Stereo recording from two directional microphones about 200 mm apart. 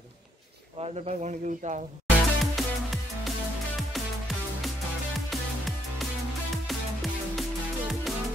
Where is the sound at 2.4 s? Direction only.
Centre (ahead or behind).